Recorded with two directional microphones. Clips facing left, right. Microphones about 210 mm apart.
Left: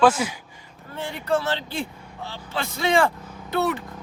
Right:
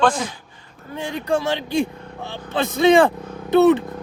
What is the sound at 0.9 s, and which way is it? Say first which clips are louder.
Speech: right 2 dB; 15° right (ahead or behind).